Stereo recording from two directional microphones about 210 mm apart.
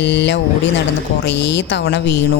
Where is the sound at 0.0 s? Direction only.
55° left (ahead or behind).